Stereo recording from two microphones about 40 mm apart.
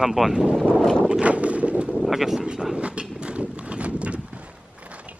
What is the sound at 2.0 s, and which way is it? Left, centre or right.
Speech, centre.